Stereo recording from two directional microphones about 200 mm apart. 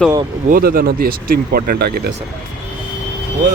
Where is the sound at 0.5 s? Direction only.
45° right (ahead or behind).